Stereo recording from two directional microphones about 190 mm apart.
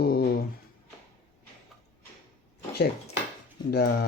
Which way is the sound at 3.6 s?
55° left (ahead or behind).